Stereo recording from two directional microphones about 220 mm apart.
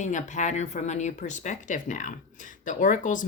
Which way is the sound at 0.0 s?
35° left (ahead or behind).